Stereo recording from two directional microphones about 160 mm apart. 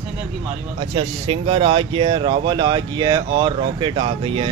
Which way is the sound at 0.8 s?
35° right (ahead or behind).